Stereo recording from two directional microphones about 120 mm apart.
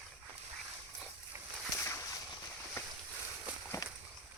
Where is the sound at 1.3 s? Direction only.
25° right (ahead or behind).